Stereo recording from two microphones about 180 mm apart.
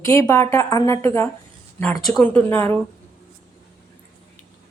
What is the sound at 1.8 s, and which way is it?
Speech, centre (ahead or behind).